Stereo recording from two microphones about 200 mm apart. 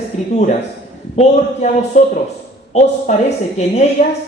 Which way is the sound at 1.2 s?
35° left (ahead or behind).